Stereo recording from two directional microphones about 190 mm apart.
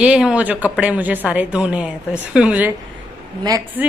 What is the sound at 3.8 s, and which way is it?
Speech, 10° right (ahead or behind).